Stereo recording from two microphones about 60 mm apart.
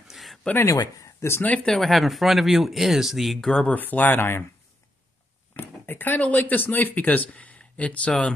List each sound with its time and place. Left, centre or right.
0.1 s a sound: centre
0.7 s speech: left
1.4 s speech: left
1.7 s speech: centre
3.3 s speech: centre
3.6 s speech: left
5.6 s speech: left